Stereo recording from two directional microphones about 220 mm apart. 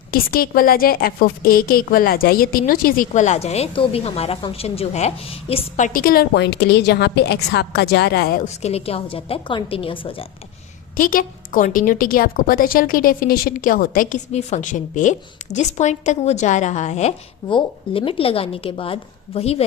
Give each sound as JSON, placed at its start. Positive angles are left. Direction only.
{"t": 0.1, "sound": "a woman's voice", "side_deg": 40}
{"t": 10.9, "sound": "a woman's voice", "side_deg": 40}